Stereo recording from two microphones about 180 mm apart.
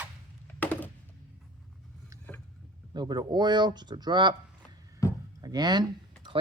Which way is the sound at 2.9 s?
25° right (ahead or behind).